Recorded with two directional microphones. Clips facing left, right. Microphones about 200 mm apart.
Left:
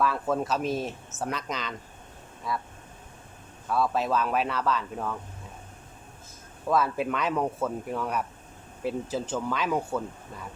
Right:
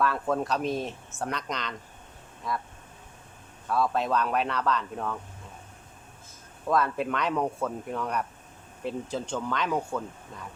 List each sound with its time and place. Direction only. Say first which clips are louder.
0.0 s speech: even; centre (ahead or behind)
3.7 s speech: even; centre (ahead or behind)
6.7 s speech: left 1 dB; 5° left (ahead or behind)